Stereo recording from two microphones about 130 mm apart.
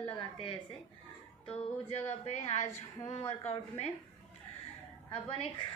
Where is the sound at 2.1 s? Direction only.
60° left (ahead or behind).